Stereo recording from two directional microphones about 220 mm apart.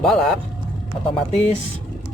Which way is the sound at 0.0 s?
Centre (ahead or behind).